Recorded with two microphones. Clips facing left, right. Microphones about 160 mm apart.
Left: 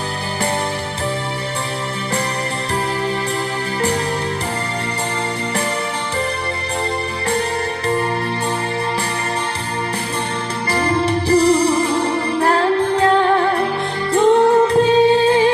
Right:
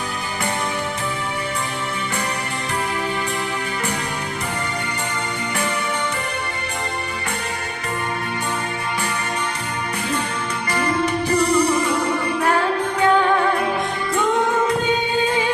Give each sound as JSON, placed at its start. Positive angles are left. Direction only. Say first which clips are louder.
{"t": 10.7, "sound": "music", "louder": "left 3 dB", "side_deg": 30}